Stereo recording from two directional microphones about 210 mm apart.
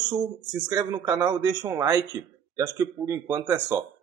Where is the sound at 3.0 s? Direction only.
15° right (ahead or behind).